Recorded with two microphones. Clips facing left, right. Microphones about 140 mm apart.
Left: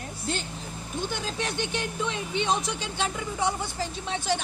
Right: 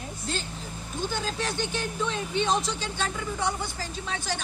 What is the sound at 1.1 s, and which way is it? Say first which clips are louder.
Speech: right 3 dB; 20° left (ahead or behind).